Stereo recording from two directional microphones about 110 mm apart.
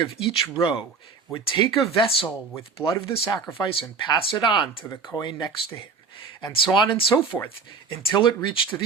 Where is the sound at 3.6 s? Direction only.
45° left (ahead or behind).